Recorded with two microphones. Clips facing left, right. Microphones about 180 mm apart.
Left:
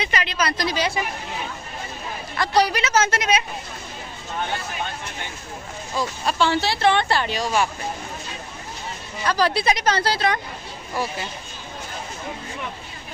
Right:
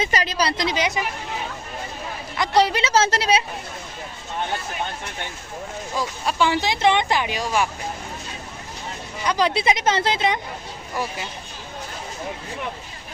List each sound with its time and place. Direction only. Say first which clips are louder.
0.0 s a woman's voice: right 2 dB; 40° right (ahead or behind); by 0.9 s 20° right (ahead or behind)
2.4 s a woman's voice: right 1 dB; 25° right (ahead or behind)
6.0 s speech: even; 10° right (ahead or behind)
9.2 s a woman's voice: even; 20° right (ahead or behind)